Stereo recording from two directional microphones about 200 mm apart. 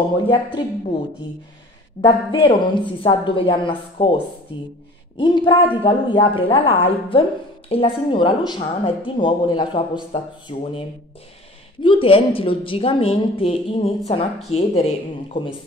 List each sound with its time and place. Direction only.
0.3 s a woman's voice: 25° left (ahead or behind)
2.0 s a woman's voice: 25° left (ahead or behind)
5.1 s a woman's voice: 25° left (ahead or behind)
11.8 s a woman's voice: 25° left (ahead or behind)